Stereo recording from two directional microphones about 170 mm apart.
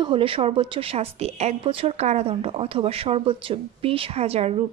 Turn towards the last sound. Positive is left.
turn(degrees=-35)  # may be behind; listen again after turning